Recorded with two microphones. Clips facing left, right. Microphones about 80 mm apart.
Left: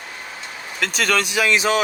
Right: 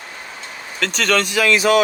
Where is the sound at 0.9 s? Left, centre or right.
Centre; by 1.8 s left.